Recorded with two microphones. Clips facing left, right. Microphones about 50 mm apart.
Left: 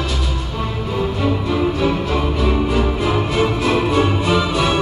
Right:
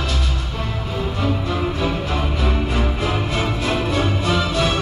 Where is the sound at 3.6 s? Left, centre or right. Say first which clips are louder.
Left 4 dB; left.